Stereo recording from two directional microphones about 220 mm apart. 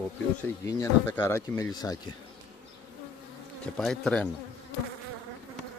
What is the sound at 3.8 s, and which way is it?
Speech, centre (ahead or behind).